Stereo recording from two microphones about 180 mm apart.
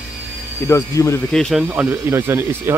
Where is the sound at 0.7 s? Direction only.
15° left (ahead or behind).